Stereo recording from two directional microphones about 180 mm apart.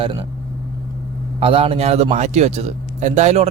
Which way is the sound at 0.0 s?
30° right (ahead or behind).